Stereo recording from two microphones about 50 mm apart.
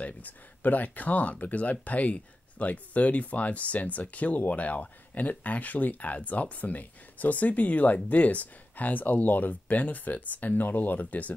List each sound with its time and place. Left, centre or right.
0.0 s speech: left